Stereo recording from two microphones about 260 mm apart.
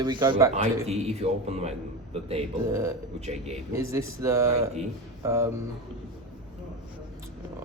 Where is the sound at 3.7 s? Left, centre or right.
Centre.